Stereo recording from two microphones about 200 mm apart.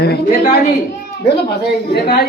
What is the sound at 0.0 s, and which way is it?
Speech, 55° left (ahead or behind).